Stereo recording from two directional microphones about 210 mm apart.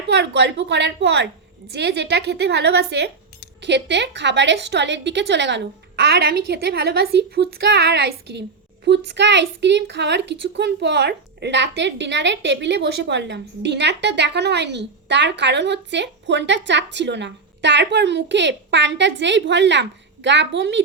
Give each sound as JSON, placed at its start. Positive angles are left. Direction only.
{"t": 0.1, "sound": "a woman's voice", "side_deg": -55}